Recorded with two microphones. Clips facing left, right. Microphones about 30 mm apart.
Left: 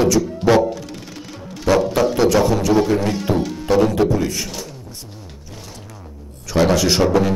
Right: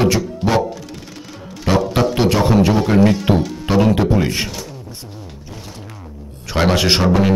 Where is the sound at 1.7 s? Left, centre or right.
Right.